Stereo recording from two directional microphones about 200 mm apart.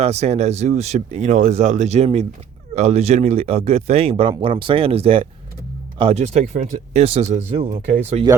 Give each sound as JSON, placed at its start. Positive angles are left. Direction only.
{"t": 0.0, "sound": "speech", "side_deg": -30}